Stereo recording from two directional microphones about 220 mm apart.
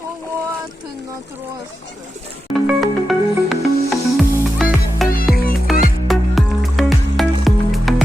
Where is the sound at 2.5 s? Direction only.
Centre (ahead or behind).